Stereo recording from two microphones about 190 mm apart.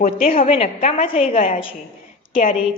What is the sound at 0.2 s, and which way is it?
A woman's voice, 35° left (ahead or behind).